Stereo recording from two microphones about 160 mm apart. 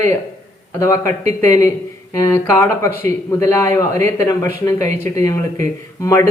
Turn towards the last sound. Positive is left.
turn(degrees=20)  # may be behind; listen again after turning